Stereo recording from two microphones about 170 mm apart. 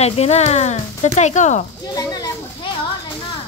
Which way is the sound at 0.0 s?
40° left (ahead or behind).